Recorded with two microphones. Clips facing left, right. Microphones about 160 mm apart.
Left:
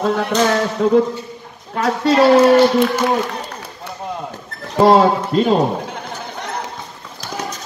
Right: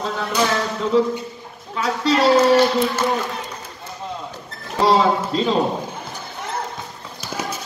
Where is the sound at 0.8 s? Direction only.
50° left (ahead or behind).